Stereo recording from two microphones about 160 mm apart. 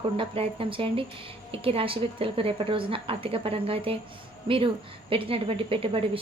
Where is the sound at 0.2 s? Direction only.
35° right (ahead or behind).